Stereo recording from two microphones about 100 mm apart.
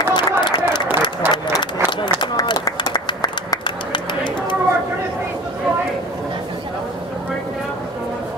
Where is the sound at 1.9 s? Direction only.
50° left (ahead or behind).